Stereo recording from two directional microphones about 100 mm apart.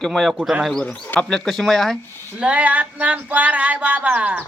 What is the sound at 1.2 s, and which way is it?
Speech, centre (ahead or behind).